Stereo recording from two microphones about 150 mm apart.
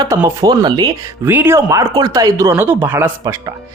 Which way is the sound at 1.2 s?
15° right (ahead or behind).